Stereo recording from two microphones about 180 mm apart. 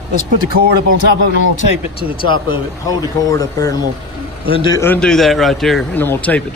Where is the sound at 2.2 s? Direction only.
25° left (ahead or behind).